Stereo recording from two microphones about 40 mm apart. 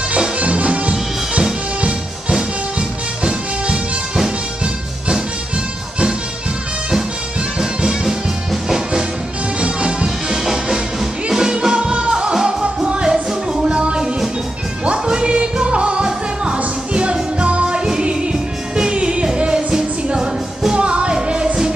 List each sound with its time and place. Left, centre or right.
0.4 s music: right
7.8 s music: centre
9.6 s music: right
10.3 s music: centre